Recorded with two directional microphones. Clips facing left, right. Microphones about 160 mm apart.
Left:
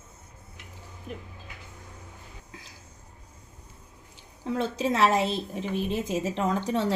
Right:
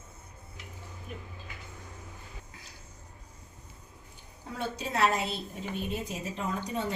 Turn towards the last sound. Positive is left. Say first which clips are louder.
# left 7 dB
turn(degrees=90)